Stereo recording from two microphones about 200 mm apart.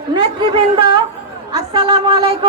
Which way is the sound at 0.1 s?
25° right (ahead or behind).